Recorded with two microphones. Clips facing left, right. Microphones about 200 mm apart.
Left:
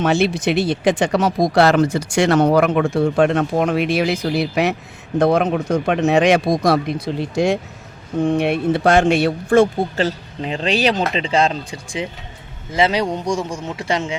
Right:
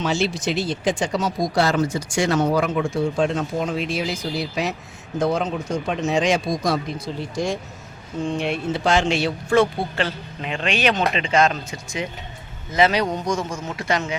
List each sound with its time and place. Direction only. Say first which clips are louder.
0.0 s speech: left 5 dB; 60° left (ahead or behind); by 14.2 s 30° left (ahead or behind)